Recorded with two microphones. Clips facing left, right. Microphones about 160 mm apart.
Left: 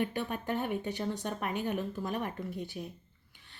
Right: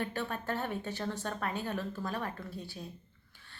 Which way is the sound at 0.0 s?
15° left (ahead or behind).